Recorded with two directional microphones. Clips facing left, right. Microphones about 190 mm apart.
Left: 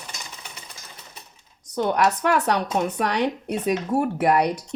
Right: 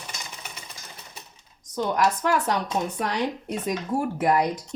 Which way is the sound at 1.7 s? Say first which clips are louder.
Left 2 dB; 65° left (ahead or behind).